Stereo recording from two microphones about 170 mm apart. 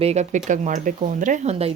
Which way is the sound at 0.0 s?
40° right (ahead or behind).